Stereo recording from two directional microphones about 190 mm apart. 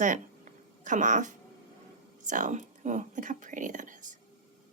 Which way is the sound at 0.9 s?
40° right (ahead or behind).